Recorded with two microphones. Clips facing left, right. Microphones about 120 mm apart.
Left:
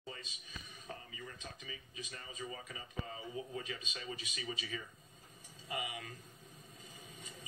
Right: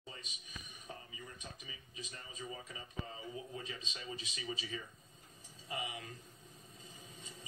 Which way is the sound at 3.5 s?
25° right (ahead or behind).